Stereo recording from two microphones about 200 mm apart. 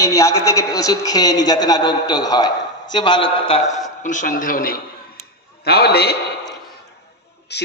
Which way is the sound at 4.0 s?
40° left (ahead or behind).